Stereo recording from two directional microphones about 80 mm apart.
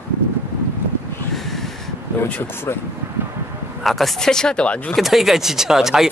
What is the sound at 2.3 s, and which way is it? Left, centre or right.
Speech, left.